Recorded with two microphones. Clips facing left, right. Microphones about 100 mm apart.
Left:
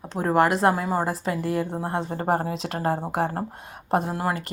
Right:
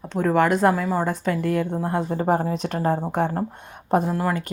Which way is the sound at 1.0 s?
5° left (ahead or behind).